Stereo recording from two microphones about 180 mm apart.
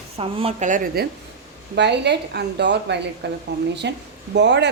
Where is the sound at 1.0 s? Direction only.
60° right (ahead or behind).